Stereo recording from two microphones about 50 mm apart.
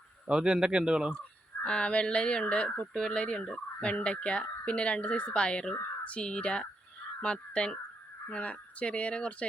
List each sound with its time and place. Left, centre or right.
0.3 s speech: centre
1.6 s speech: left